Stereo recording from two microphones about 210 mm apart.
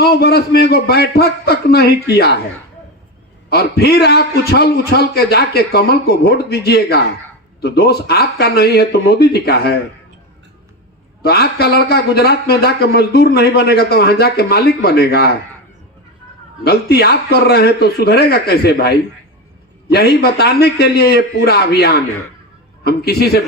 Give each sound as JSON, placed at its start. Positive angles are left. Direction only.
{"t": 0.0, "sound": "speech", "side_deg": 50}
{"t": 3.5, "sound": "speech", "side_deg": 50}
{"t": 11.2, "sound": "speech", "side_deg": 50}
{"t": 16.6, "sound": "speech", "side_deg": 50}